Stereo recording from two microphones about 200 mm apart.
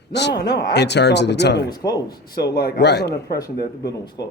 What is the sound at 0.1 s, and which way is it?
Speech, 55° left (ahead or behind).